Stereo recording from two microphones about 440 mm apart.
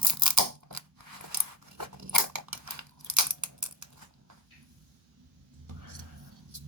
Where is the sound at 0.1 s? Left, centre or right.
Right.